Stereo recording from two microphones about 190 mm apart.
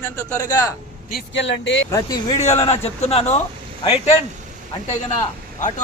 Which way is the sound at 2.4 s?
35° left (ahead or behind).